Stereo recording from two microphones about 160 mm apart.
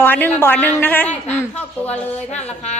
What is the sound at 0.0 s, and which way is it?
A woman's voice, 10° left (ahead or behind).